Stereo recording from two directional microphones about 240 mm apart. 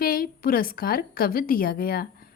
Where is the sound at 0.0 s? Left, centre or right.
Left.